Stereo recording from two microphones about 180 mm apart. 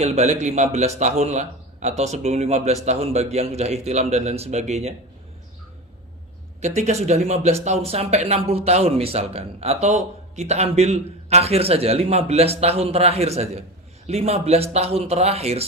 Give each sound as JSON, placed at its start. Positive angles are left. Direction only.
{"t": 0.0, "sound": "speech", "side_deg": -40}
{"t": 6.6, "sound": "speech", "side_deg": -40}